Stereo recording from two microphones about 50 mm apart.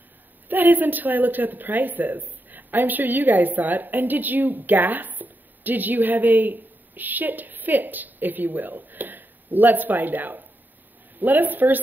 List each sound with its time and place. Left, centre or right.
0.5 s speech: right